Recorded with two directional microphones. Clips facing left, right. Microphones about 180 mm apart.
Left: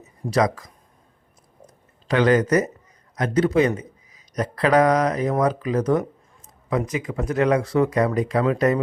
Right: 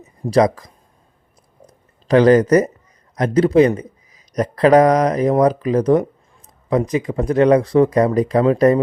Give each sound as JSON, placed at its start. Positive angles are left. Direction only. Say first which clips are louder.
{"t": 0.3, "sound": "speech", "louder": "right 6 dB", "side_deg": -35}
{"t": 2.0, "sound": "speech", "louder": "right 7 dB", "side_deg": -35}